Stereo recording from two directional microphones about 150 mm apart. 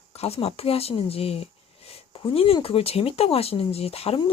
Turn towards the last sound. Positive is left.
turn(degrees=40)  # may be behind; listen again after turning